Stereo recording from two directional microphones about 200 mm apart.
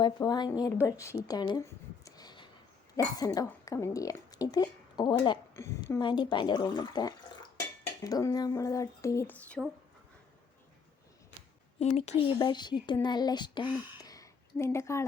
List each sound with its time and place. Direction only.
0.0 s a woman's voice: 20° left (ahead or behind)
9.6 s speech: centre (ahead or behind)
11.8 s speech: 35° left (ahead or behind)
12.4 s a woman's voice: 20° left (ahead or behind)
14.0 s a sound: 15° left (ahead or behind)